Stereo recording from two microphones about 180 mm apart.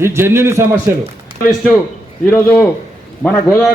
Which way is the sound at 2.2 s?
10° left (ahead or behind).